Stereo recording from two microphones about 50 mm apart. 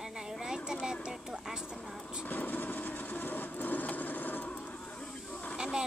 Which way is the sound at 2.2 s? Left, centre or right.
Left.